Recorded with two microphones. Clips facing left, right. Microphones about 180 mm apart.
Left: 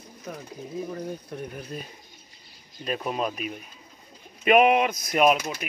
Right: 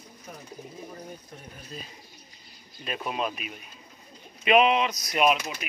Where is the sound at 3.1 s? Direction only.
40° left (ahead or behind).